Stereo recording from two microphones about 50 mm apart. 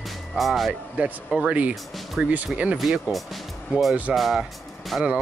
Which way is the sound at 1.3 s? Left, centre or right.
Centre.